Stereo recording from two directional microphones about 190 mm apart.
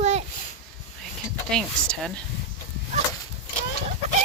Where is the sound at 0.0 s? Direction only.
35° right (ahead or behind).